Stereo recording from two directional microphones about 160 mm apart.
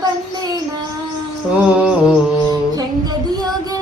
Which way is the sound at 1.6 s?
5° right (ahead or behind).